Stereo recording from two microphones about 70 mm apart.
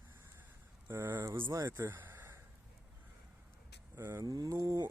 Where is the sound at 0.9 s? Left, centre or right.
Right.